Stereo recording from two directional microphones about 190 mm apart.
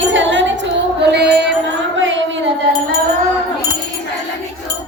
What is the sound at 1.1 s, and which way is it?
Music, 60° right (ahead or behind).